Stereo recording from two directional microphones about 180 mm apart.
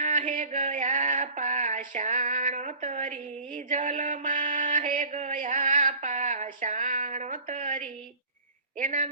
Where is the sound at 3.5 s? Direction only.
45° right (ahead or behind).